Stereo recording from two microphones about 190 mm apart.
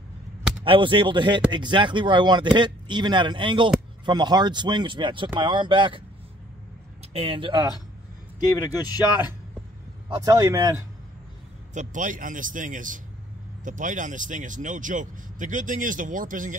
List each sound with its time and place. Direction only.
0.7 s speech: 25° right (ahead or behind)
7.2 s speech: 30° right (ahead or behind)
8.4 s speech: 20° left (ahead or behind)
10.1 s speech: 15° right (ahead or behind)
11.7 s speech: 40° right (ahead or behind)